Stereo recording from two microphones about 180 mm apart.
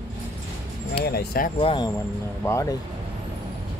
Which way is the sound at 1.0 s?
60° left (ahead or behind).